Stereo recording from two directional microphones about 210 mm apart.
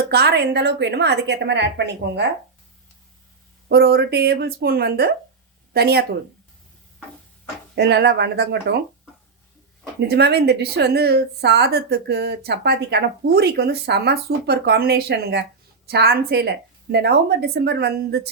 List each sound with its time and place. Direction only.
0.1 s speech: 50° right (ahead or behind)
3.7 s speech: 50° right (ahead or behind)
7.8 s speech: 55° right (ahead or behind)
10.0 s speech: 50° right (ahead or behind)